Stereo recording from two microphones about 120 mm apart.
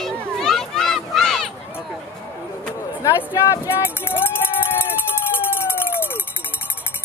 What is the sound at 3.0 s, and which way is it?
Speech, 25° left (ahead or behind).